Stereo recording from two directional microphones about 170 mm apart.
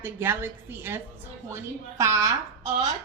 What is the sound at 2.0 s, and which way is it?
Speech, 20° right (ahead or behind).